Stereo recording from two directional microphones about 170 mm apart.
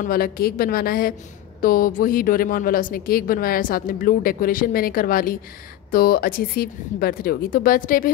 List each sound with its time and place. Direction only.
0.0 s a woman's voice: 60° left (ahead or behind)